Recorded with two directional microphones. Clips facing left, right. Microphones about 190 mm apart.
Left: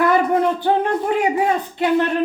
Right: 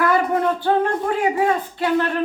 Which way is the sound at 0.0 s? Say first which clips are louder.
Left 2 dB; 20° left (ahead or behind).